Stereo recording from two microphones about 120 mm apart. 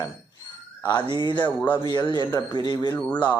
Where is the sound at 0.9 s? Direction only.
35° left (ahead or behind).